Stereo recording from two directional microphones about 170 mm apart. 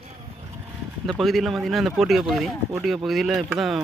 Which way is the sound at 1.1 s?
Centre (ahead or behind).